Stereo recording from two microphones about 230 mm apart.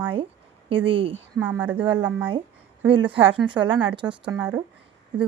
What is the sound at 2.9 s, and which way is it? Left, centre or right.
Speech, right.